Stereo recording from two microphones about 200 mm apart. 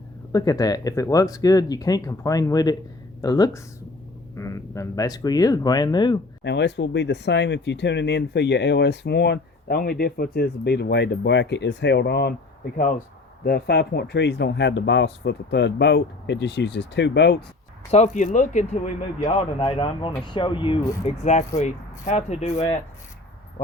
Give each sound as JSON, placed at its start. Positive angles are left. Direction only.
{"t": 0.3, "sound": "speech", "side_deg": 20}
{"t": 6.4, "sound": "speech", "side_deg": 60}
{"t": 13.4, "sound": "speech", "side_deg": 50}
{"t": 17.9, "sound": "speech", "side_deg": 35}